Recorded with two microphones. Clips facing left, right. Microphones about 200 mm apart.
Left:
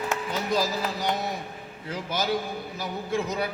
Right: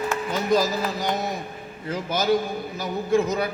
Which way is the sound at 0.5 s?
45° right (ahead or behind).